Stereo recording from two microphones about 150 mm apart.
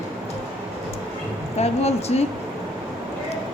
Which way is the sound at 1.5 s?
45° left (ahead or behind).